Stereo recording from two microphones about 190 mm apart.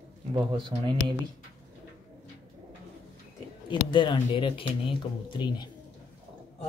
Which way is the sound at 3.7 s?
25° left (ahead or behind).